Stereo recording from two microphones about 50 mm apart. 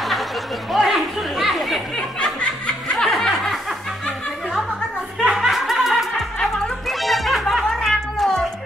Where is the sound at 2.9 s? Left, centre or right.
Centre.